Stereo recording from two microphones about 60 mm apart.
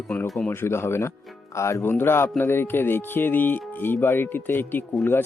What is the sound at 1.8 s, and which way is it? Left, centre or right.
Speech, left.